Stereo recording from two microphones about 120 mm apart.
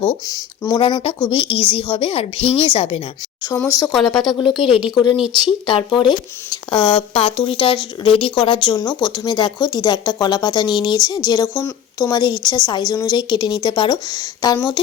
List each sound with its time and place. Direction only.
0.3 s speech: 30° left (ahead or behind)
1.3 s a woman's voice: 45° left (ahead or behind)
3.5 s speech: 25° left (ahead or behind)
3.8 s speech: 5° left (ahead or behind)
4.4 s a woman's voice: 45° left (ahead or behind)
11.5 s speech: 25° left (ahead or behind)
12.1 s speech: 35° left (ahead or behind)